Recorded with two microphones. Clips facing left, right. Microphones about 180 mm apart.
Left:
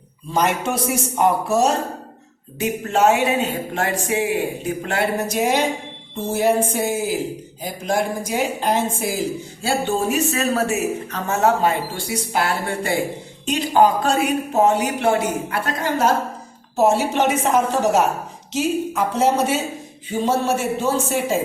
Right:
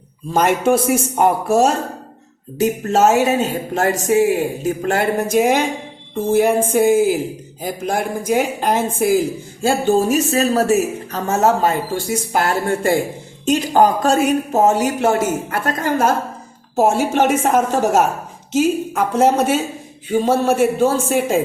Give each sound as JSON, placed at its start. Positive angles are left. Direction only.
{"t": 0.3, "sound": "speech", "side_deg": -50}
{"t": 2.6, "sound": "speech", "side_deg": -40}
{"t": 7.6, "sound": "speech", "side_deg": -50}